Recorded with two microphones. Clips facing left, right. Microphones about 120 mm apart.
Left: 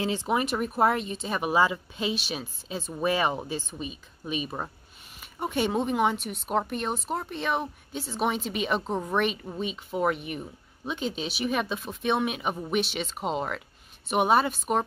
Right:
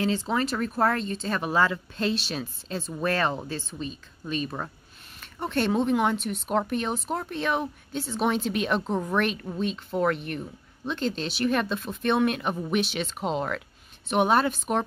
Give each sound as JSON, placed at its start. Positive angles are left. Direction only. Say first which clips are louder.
{"t": 0.0, "sound": "speech", "louder": "right 1 dB", "side_deg": 20}